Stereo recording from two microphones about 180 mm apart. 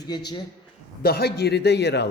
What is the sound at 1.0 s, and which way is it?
A man's voice, 60° left (ahead or behind).